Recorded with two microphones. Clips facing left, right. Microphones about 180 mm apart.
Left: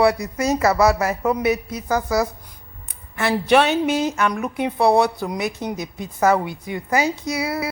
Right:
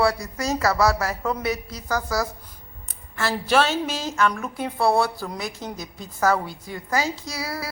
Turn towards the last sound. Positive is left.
turn(degrees=20)  # may be behind; listen again after turning